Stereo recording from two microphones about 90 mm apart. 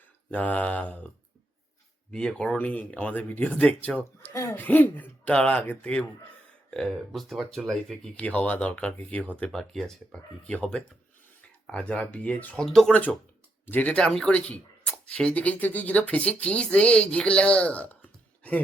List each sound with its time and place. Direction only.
0.3 s speech: 15° left (ahead or behind)
4.3 s speech: 25° left (ahead or behind); by 8.1 s 5° left (ahead or behind)
8.1 s speech: 15° left (ahead or behind)
12.6 s speech: 5° left (ahead or behind)
12.9 s speech: 15° left (ahead or behind)